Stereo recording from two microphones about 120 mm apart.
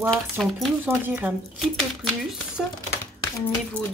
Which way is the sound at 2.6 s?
Centre (ahead or behind).